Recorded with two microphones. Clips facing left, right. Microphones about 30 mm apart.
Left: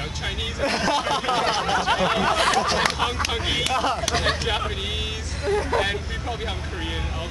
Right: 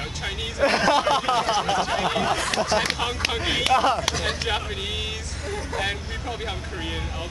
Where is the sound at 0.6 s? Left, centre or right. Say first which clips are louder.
Right 4 dB; centre.